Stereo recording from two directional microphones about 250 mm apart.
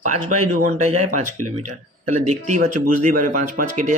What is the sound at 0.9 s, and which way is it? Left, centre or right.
Speech, right.